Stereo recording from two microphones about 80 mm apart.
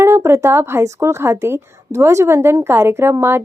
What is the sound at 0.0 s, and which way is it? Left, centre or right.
A woman's voice, right.